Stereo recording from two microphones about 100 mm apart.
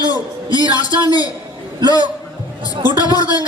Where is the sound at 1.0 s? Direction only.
40° left (ahead or behind).